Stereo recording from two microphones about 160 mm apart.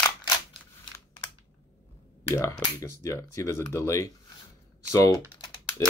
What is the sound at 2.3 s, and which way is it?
Speech, 20° left (ahead or behind).